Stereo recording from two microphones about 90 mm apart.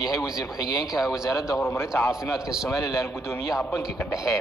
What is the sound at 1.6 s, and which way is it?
Speech, 25° left (ahead or behind).